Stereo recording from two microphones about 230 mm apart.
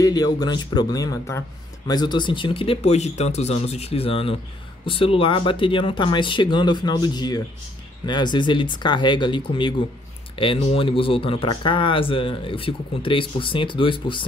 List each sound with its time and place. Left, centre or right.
0.0 s speech: centre